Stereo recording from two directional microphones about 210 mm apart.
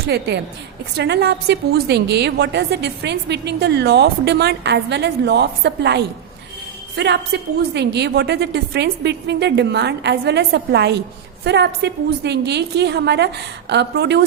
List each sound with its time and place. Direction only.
0.1 s a woman's voice: 55° right (ahead or behind)